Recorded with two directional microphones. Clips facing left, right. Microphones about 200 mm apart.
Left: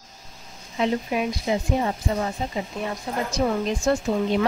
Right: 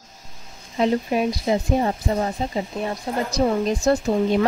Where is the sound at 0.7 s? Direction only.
40° right (ahead or behind).